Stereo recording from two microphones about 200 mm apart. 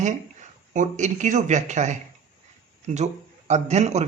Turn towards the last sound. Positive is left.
turn(degrees=-35)  # may be behind; listen again after turning